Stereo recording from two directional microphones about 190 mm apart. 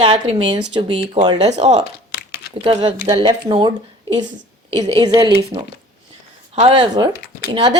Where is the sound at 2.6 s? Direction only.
25° right (ahead or behind).